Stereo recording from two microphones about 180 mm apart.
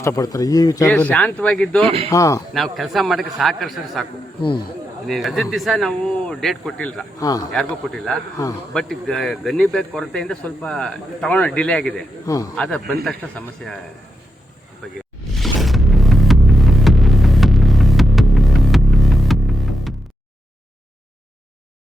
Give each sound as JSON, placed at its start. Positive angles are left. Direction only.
{"t": 0.0, "sound": "speech", "side_deg": 20}
{"t": 0.9, "sound": "a man's voice", "side_deg": 10}
{"t": 2.0, "sound": "speech", "side_deg": 20}
{"t": 2.5, "sound": "a man's voice", "side_deg": 0}
{"t": 4.4, "sound": "speech", "side_deg": 25}
{"t": 5.0, "sound": "a man's voice", "side_deg": 0}
{"t": 7.2, "sound": "speech", "side_deg": 20}
{"t": 7.5, "sound": "a man's voice", "side_deg": 0}
{"t": 8.4, "sound": "speech", "side_deg": 20}
{"t": 8.7, "sound": "a man's voice", "side_deg": 5}
{"t": 12.2, "sound": "a man's voice", "side_deg": 20}
{"t": 12.5, "sound": "a man's voice", "side_deg": 5}
{"t": 15.4, "sound": "a sound", "side_deg": 0}